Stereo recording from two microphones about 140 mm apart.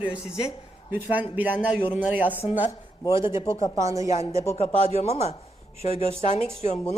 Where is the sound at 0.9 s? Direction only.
10° right (ahead or behind).